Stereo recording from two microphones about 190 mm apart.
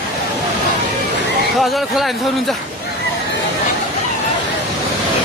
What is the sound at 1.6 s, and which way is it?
Speech, centre (ahead or behind).